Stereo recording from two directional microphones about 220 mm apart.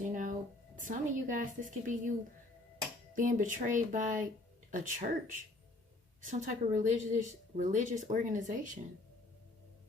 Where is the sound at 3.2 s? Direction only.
35° right (ahead or behind).